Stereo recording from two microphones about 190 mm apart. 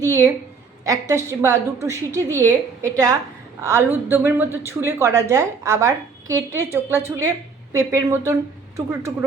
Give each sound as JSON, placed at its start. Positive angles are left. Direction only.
{"t": 0.9, "sound": "speech", "side_deg": -15}